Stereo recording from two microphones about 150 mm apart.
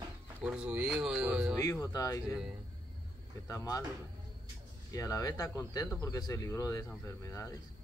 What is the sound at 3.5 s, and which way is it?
Speech, 20° left (ahead or behind).